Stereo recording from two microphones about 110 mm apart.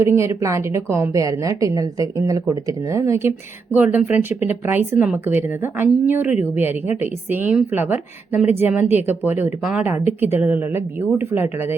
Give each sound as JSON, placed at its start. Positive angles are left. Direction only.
{"t": 0.0, "sound": "a woman's voice", "side_deg": -25}
{"t": 3.8, "sound": "a woman's voice", "side_deg": -15}